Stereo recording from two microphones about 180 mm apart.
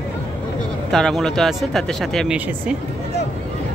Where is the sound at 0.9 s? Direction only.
5° left (ahead or behind).